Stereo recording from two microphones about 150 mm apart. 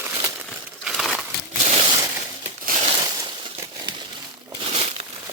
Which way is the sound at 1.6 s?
45° right (ahead or behind).